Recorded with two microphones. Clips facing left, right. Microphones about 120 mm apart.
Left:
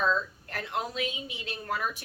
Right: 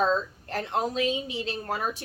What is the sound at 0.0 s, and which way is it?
Speech, 30° right (ahead or behind).